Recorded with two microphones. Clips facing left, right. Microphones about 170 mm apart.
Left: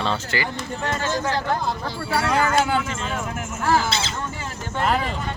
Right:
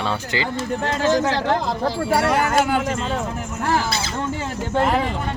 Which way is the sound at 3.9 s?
25° left (ahead or behind).